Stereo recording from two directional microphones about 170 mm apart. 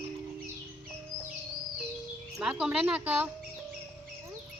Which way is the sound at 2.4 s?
5° right (ahead or behind).